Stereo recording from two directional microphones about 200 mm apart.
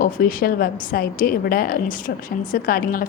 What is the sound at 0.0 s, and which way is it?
A woman's voice, 45° left (ahead or behind).